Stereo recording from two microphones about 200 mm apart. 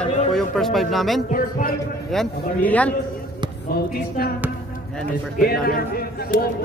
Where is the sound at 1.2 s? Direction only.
45° left (ahead or behind).